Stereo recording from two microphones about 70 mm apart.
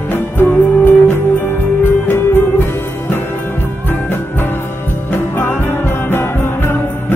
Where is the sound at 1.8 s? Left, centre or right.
Left.